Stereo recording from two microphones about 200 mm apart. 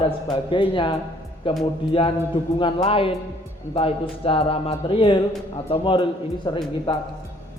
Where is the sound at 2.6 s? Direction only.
30° left (ahead or behind).